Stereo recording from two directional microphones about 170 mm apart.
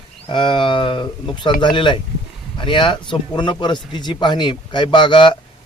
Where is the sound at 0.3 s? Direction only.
30° left (ahead or behind).